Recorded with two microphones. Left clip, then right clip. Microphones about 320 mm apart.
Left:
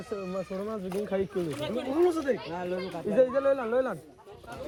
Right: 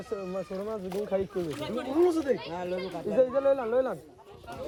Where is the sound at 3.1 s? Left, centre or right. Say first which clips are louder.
Even; left.